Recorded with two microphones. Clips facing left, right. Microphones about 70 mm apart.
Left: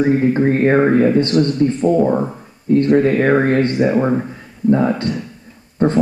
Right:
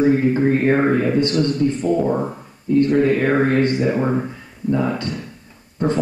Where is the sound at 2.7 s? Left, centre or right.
Left.